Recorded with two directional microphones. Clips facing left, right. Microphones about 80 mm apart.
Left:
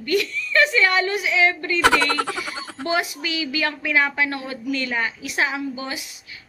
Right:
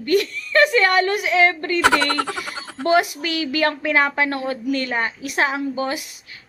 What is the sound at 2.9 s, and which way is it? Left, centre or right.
A woman's voice, right.